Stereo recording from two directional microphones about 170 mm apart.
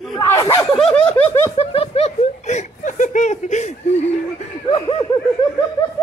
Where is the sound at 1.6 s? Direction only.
35° left (ahead or behind).